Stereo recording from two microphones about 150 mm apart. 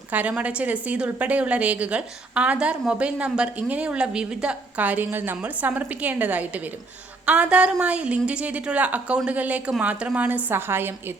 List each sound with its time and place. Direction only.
0.1 s a woman's voice: 10° right (ahead or behind)